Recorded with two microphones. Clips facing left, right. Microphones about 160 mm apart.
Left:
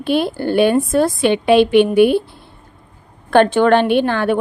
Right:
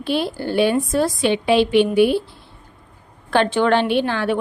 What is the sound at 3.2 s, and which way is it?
A woman's voice, 50° left (ahead or behind).